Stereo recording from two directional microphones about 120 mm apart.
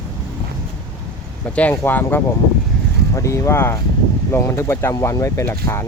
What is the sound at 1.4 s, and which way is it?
Speech, 10° left (ahead or behind).